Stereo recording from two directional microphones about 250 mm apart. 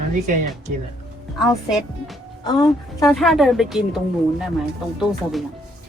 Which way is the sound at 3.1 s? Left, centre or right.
Centre.